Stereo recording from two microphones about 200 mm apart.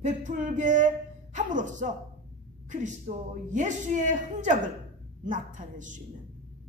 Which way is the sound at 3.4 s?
40° right (ahead or behind).